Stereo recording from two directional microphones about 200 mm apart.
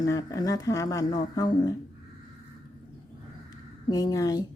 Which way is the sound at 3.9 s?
20° left (ahead or behind).